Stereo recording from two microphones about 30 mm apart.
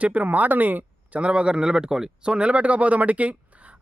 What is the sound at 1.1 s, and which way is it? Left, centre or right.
Speech, right.